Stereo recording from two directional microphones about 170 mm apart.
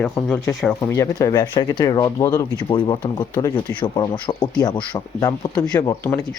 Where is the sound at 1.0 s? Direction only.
20° left (ahead or behind).